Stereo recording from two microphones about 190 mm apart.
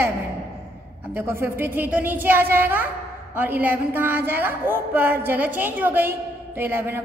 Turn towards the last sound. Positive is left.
turn(degrees=-10)  # may be behind; listen again after turning